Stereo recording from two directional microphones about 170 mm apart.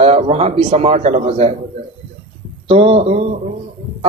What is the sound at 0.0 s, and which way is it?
Speech, 35° right (ahead or behind).